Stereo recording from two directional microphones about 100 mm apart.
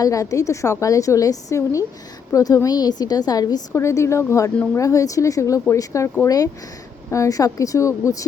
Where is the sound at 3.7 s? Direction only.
30° left (ahead or behind).